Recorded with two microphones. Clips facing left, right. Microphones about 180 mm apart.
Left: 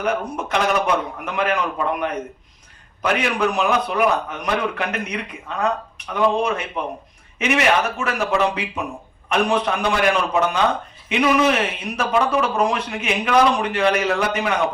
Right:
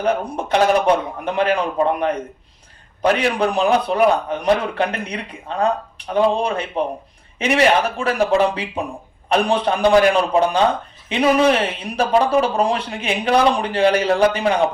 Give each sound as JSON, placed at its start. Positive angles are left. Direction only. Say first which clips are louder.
{"t": 0.0, "sound": "a man's voice", "louder": "right 3 dB", "side_deg": -30}